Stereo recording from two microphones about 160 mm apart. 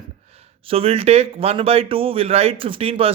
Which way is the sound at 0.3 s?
40° right (ahead or behind).